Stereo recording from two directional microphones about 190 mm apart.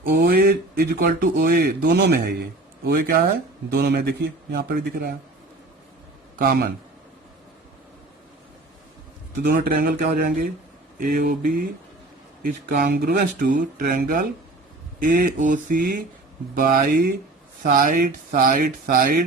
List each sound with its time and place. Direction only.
0.1 s speech: 50° right (ahead or behind)
6.3 s a man's voice: 50° right (ahead or behind)
9.4 s speech: 50° right (ahead or behind)